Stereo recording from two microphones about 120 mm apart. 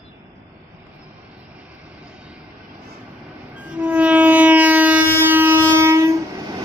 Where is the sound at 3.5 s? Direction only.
10° right (ahead or behind).